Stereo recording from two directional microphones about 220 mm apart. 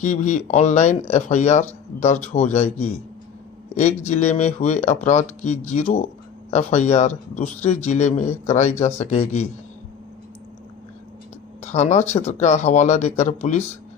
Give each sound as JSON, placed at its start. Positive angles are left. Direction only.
{"t": 0.0, "sound": "a man's voice", "side_deg": 35}
{"t": 11.6, "sound": "speech", "side_deg": 30}